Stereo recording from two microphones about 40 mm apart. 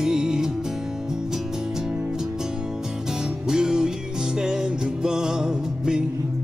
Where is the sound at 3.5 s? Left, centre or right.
Centre.